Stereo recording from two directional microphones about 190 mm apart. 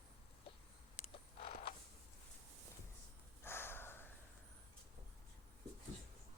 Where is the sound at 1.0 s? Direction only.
30° left (ahead or behind).